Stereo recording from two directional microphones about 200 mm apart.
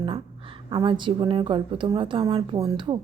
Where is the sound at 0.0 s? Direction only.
25° right (ahead or behind).